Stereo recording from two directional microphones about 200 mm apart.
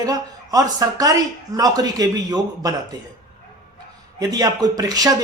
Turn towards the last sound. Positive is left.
turn(degrees=-20)  # may be behind; listen again after turning